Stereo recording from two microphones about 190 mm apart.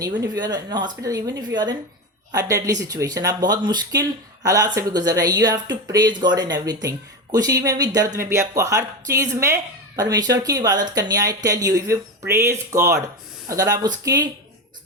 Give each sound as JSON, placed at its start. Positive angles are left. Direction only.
{"t": 0.0, "sound": "speech", "side_deg": -20}